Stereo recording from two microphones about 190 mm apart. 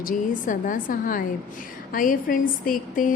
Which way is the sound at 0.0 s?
45° left (ahead or behind).